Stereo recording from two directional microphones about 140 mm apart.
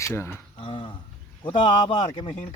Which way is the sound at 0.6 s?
40° left (ahead or behind).